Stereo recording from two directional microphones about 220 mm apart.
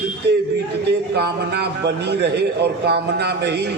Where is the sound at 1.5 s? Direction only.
50° right (ahead or behind).